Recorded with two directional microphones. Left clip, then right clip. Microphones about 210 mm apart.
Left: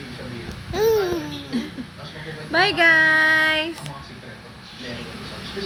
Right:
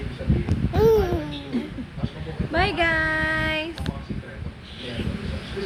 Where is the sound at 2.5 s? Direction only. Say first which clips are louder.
Left 6 dB; 40° left (ahead or behind).